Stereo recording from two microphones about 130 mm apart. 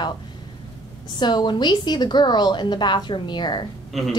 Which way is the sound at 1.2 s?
35° left (ahead or behind).